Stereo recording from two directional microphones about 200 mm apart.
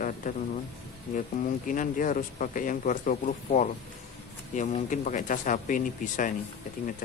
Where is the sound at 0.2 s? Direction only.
40° left (ahead or behind).